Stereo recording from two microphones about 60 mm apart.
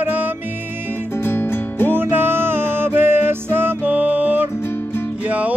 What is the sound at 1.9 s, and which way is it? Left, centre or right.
Music, right.